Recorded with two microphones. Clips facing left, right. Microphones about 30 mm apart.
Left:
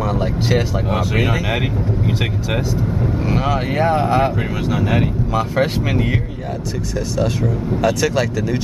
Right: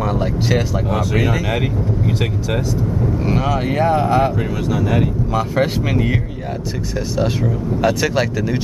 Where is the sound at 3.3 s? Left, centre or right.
Centre.